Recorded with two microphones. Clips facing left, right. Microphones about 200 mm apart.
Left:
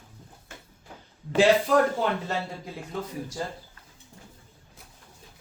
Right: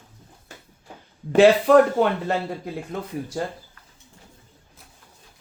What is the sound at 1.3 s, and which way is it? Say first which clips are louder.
Speech: right 6 dB; 65° right (ahead or behind).